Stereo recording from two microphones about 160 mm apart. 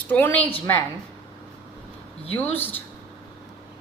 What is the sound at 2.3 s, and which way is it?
Speech, 10° left (ahead or behind).